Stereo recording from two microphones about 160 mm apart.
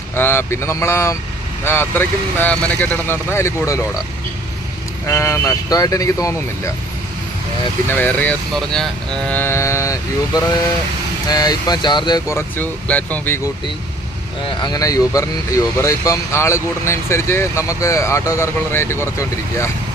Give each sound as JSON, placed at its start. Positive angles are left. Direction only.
{"t": 0.2, "sound": "speech", "side_deg": 15}
{"t": 5.0, "sound": "speech", "side_deg": 15}
{"t": 7.9, "sound": "speech", "side_deg": 10}
{"t": 14.4, "sound": "speech", "side_deg": 25}